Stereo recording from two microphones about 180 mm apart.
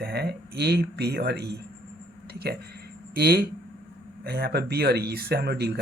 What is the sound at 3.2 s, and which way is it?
Speech, 60° right (ahead or behind).